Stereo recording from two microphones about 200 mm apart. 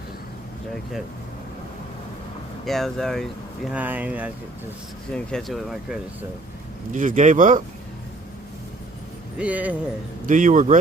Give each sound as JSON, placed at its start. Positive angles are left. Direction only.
{"t": 2.6, "sound": "speech", "side_deg": 0}
{"t": 6.9, "sound": "speech", "side_deg": -40}
{"t": 9.4, "sound": "speech", "side_deg": -5}
{"t": 10.2, "sound": "speech", "side_deg": -40}